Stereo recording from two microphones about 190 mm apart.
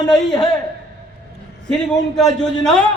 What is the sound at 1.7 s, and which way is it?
A man's voice, 5° left (ahead or behind).